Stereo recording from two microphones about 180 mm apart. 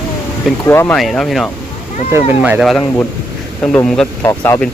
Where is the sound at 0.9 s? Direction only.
Centre (ahead or behind).